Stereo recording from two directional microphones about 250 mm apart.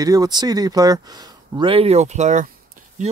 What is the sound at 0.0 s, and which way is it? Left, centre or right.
Speech, centre.